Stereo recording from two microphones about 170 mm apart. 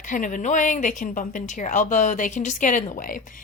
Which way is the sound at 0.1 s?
50° left (ahead or behind).